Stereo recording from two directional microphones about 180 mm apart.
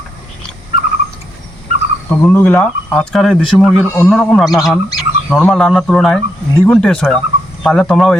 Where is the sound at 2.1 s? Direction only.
10° left (ahead or behind).